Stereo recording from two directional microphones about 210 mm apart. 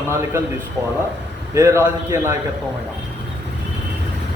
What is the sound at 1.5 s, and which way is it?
Speech, 15° right (ahead or behind).